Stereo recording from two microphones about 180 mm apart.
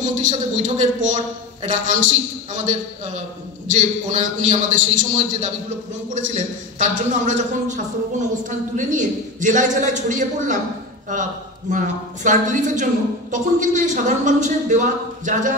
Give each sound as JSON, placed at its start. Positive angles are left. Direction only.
{"t": 0.0, "sound": "a man's voice", "side_deg": -45}
{"t": 11.7, "sound": "a man's voice", "side_deg": -45}